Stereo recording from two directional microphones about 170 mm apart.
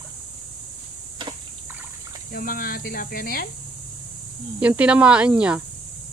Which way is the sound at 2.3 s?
60° left (ahead or behind).